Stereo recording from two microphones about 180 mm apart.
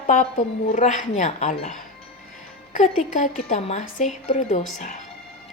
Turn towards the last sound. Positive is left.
turn(degrees=40)  # may be behind; listen again after turning